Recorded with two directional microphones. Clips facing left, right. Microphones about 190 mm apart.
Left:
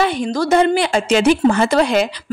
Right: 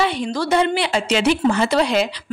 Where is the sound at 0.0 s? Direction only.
45° left (ahead or behind).